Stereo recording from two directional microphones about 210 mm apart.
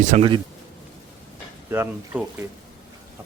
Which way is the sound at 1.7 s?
10° right (ahead or behind).